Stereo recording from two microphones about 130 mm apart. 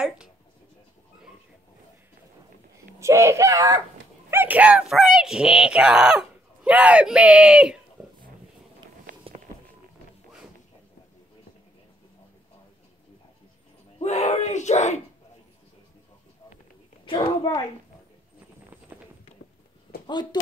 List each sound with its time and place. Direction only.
3.0 s speech: 20° right (ahead or behind)
4.3 s speech: 15° right (ahead or behind)
13.9 s speech: 55° left (ahead or behind)
17.0 s a woman's voice: 40° left (ahead or behind)
20.1 s speech: 35° left (ahead or behind)